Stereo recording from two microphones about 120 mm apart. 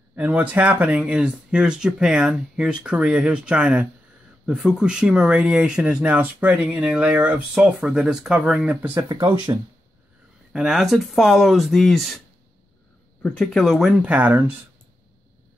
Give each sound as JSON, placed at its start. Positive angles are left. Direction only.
{"t": 0.1, "sound": "speech", "side_deg": -15}
{"t": 8.9, "sound": "speech", "side_deg": -35}
{"t": 10.5, "sound": "speech", "side_deg": -5}
{"t": 13.2, "sound": "speech", "side_deg": 10}